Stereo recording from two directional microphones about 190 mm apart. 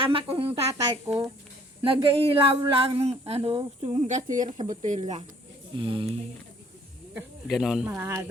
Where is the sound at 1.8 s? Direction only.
30° right (ahead or behind).